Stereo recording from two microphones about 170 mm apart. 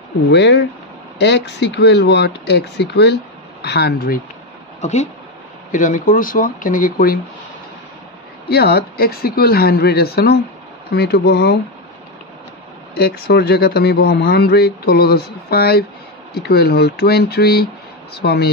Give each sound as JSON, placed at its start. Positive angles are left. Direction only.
{"t": 0.3, "sound": "speech", "side_deg": 90}
{"t": 5.7, "sound": "speech", "side_deg": 50}
{"t": 8.5, "sound": "speech", "side_deg": 70}
{"t": 12.9, "sound": "speech", "side_deg": 75}